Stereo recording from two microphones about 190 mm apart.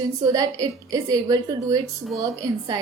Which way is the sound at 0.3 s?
15° right (ahead or behind).